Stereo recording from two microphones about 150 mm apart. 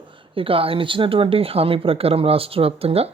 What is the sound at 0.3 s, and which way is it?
A woman's voice, 40° right (ahead or behind).